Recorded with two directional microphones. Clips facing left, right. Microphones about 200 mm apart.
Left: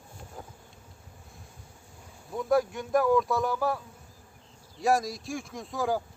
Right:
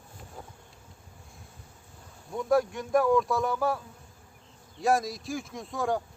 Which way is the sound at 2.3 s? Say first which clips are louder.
Even; centre (ahead or behind).